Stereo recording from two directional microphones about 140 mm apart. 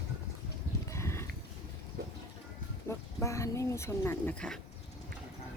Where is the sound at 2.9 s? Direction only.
20° left (ahead or behind).